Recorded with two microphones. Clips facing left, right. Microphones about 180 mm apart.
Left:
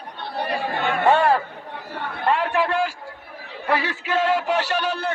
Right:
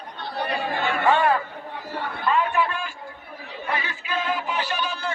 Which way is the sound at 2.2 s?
75° left (ahead or behind).